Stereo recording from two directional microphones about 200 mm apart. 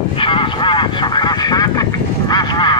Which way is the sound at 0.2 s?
25° left (ahead or behind).